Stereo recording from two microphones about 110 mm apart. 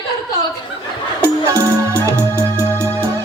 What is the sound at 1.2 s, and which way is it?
Music, 20° right (ahead or behind).